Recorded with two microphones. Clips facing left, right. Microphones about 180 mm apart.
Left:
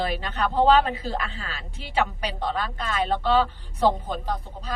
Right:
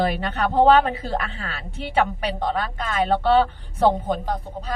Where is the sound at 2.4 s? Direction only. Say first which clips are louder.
Right 1 dB; 50° right (ahead or behind).